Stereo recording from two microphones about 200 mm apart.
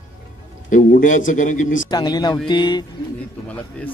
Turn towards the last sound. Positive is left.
turn(degrees=10)  # may be behind; listen again after turning